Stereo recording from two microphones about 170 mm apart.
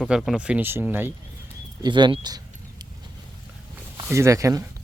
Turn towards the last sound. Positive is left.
turn(degrees=-20)  # may be behind; listen again after turning